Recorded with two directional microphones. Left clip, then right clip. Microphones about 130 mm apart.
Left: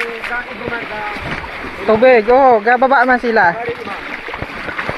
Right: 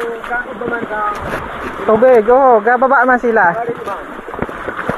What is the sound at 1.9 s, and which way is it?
Speech, 25° left (ahead or behind).